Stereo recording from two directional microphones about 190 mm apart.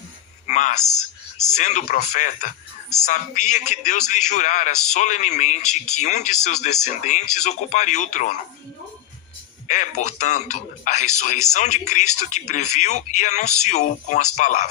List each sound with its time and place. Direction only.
0.4 s a sound: 40° left (ahead or behind)
1.5 s a man's voice: 40° left (ahead or behind)
9.6 s a man's voice: 40° left (ahead or behind)